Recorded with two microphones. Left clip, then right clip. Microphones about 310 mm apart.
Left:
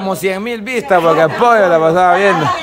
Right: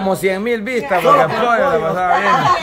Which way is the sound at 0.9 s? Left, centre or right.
Centre.